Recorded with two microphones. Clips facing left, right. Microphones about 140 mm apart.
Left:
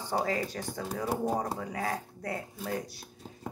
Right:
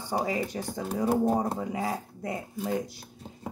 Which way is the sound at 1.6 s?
20° right (ahead or behind).